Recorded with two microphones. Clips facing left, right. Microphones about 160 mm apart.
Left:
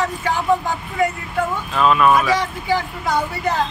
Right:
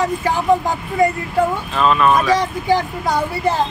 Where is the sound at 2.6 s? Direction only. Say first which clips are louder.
Right 3 dB; 40° right (ahead or behind).